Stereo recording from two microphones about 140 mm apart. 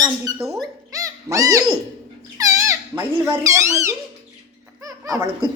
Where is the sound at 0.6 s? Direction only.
25° right (ahead or behind).